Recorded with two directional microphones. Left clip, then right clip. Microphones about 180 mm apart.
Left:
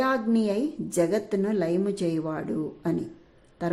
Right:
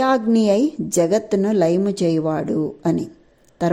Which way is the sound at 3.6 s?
35° right (ahead or behind).